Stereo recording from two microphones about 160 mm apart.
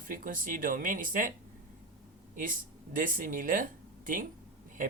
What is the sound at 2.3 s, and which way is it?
Speech, 55° right (ahead or behind).